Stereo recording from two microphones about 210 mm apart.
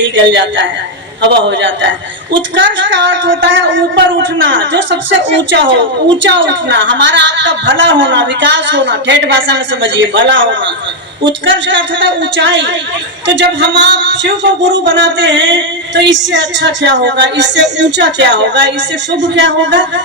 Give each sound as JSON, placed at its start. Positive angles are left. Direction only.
{"t": 0.0, "sound": "a woman's voice", "side_deg": -55}